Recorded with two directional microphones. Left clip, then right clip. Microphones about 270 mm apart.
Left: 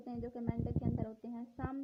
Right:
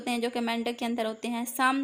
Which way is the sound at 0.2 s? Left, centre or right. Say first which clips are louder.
Right 13 dB; left.